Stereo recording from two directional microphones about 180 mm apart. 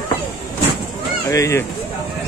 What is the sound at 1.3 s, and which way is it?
Speech, 15° left (ahead or behind).